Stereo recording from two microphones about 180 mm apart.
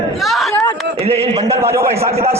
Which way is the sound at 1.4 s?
15° right (ahead or behind).